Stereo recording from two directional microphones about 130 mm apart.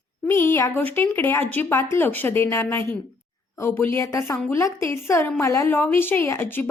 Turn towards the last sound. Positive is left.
turn(degrees=15)  # may be behind; listen again after turning